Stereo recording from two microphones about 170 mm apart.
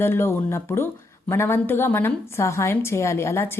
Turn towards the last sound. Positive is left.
turn(degrees=15)  # may be behind; listen again after turning